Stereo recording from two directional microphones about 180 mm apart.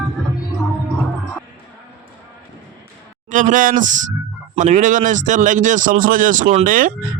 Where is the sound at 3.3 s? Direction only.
45° right (ahead or behind).